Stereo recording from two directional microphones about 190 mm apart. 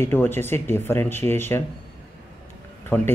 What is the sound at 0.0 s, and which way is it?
Speech, 10° left (ahead or behind).